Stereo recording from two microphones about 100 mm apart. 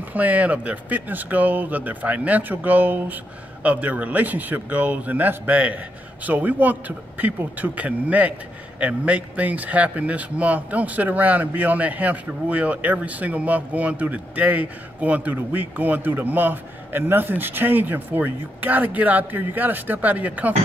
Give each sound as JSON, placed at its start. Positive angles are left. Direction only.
{"t": 0.1, "sound": "speech", "side_deg": -15}